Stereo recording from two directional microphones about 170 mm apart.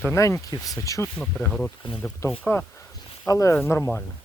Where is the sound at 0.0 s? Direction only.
15° left (ahead or behind).